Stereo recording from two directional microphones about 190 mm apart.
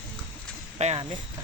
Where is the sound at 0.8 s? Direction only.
35° right (ahead or behind).